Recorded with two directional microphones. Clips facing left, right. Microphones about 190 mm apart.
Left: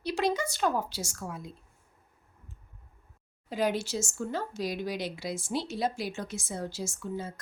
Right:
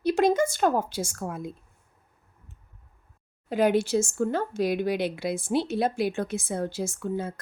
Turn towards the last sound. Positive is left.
turn(degrees=-55)  # may be behind; listen again after turning